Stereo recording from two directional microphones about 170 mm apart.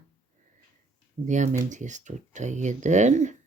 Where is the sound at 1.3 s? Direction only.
45° right (ahead or behind).